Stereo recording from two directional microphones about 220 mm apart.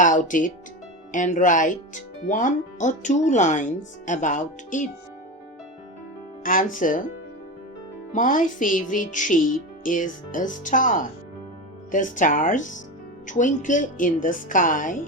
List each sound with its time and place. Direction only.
0.0 s speech: 35° left (ahead or behind)
6.4 s speech: 35° left (ahead or behind)
8.1 s speech: 35° left (ahead or behind)